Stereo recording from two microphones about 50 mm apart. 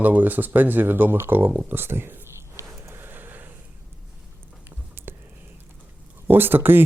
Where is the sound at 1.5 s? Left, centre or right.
Right.